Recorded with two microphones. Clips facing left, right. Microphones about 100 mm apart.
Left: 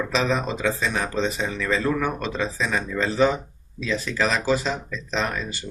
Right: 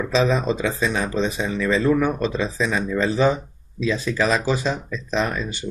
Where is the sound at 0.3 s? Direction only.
15° right (ahead or behind).